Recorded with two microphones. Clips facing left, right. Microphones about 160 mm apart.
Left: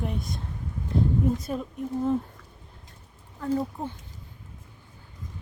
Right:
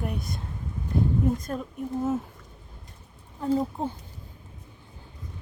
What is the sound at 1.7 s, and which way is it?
Speech, 5° right (ahead or behind).